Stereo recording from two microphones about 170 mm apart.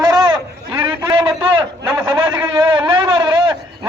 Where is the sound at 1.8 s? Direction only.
10° right (ahead or behind).